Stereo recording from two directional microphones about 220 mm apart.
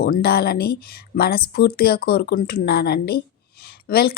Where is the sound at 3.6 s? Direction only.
45° left (ahead or behind).